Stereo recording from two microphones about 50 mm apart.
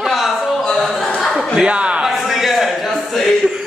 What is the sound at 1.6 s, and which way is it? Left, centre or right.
Speech, right.